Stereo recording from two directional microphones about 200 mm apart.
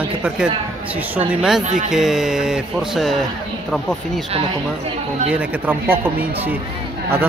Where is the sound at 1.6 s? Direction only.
40° right (ahead or behind).